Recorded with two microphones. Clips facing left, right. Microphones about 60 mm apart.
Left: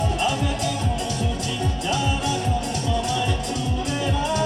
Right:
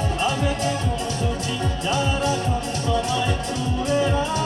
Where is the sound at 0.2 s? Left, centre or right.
Right.